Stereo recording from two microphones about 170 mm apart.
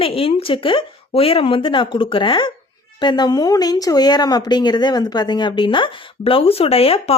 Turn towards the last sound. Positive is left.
turn(degrees=35)  # may be behind; listen again after turning